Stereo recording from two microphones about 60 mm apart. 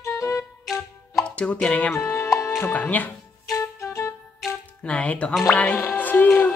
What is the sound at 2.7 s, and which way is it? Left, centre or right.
Speech, left.